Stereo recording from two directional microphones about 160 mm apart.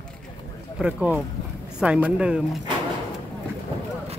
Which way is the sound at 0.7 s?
5° right (ahead or behind).